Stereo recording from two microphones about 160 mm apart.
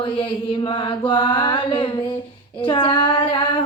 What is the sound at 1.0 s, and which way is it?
Mantra, 30° left (ahead or behind).